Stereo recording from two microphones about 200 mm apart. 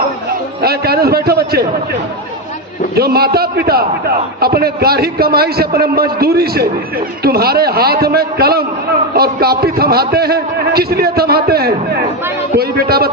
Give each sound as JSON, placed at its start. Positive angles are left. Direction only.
{"t": 0.6, "sound": "a man's voice", "side_deg": -50}
{"t": 2.9, "sound": "a man's voice", "side_deg": -50}